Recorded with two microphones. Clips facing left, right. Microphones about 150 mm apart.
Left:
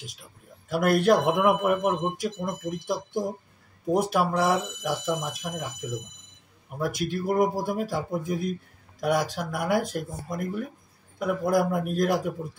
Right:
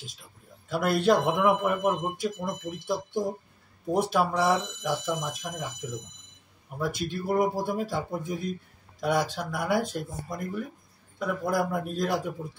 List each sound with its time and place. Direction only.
0.7 s speech: 10° left (ahead or behind)
6.8 s speech: 10° left (ahead or behind)